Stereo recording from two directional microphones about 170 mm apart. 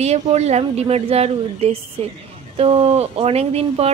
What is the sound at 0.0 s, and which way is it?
Speech, 40° right (ahead or behind).